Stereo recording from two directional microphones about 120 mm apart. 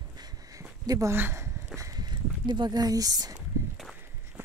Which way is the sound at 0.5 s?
25° right (ahead or behind).